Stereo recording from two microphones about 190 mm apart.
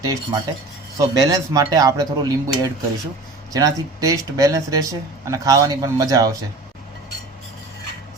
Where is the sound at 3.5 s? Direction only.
20° right (ahead or behind).